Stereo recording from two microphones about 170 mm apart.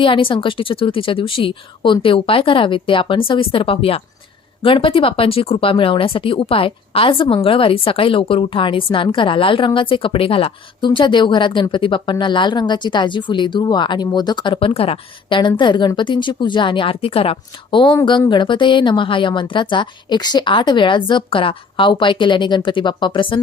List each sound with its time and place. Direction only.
0.0 s a woman's voice: 30° left (ahead or behind)